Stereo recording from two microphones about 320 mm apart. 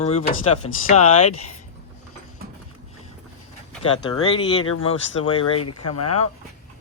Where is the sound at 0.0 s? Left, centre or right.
Centre.